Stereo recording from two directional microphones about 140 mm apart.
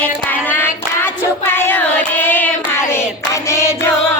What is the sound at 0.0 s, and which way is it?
Hands, 15° left (ahead or behind).